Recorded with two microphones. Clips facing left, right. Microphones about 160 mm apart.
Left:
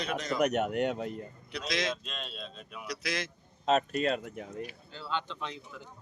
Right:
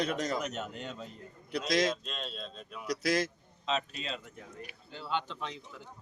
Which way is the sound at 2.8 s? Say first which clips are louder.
Right 6 dB; 40° right (ahead or behind).